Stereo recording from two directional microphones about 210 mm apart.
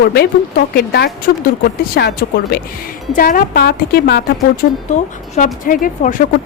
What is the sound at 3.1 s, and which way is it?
Speech, 40° left (ahead or behind).